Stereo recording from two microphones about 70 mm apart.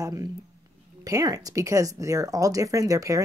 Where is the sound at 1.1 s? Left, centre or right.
Right.